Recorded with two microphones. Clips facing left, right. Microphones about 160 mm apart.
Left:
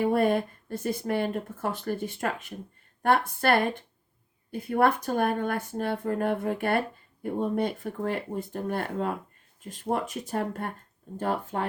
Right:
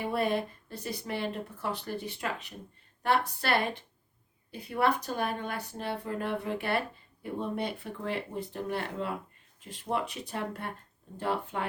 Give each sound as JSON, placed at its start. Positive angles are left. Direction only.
{"t": 0.0, "sound": "speech", "side_deg": 50}